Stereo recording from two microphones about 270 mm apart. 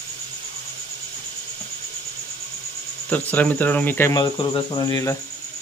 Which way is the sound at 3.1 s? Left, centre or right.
Centre.